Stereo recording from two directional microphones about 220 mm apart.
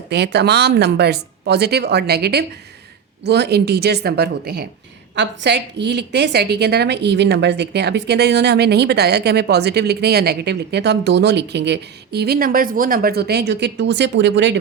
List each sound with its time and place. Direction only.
0.1 s a woman's voice: 50° right (ahead or behind)